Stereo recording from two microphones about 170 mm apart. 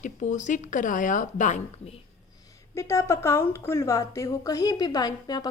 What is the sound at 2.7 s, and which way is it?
A woman's voice, 15° left (ahead or behind).